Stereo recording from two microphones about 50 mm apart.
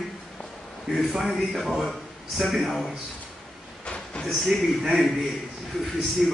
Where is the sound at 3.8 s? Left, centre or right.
Left.